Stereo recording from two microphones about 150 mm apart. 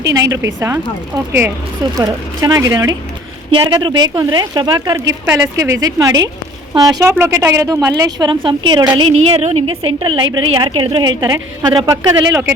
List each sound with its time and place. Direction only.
0.1 s a woman's voice: 25° right (ahead or behind)
5.2 s a woman's voice: 15° right (ahead or behind)
9.0 s a woman's voice: 40° right (ahead or behind); by 12.4 s 25° right (ahead or behind)